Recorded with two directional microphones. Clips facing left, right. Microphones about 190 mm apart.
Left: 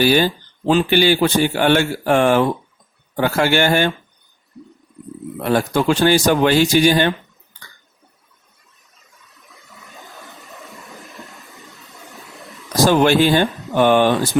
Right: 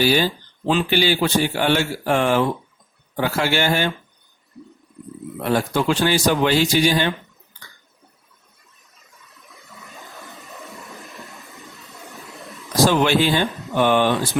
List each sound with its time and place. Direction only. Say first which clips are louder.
0.0 s speech: left 3 dB; 55° left (ahead or behind)
5.5 s speech: left 3 dB; 50° left (ahead or behind)
9.5 s a sound: right 1 dB; centre (ahead or behind)
12.9 s speech: left 8 dB; 55° left (ahead or behind)